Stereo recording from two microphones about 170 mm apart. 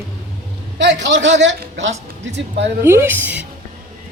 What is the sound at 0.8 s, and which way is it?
A man's voice, 90° right.